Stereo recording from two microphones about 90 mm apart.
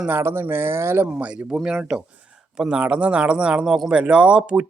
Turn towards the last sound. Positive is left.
turn(degrees=-10)  # may be behind; listen again after turning